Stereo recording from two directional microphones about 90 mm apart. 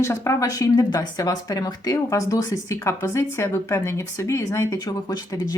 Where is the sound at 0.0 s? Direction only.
35° left (ahead or behind).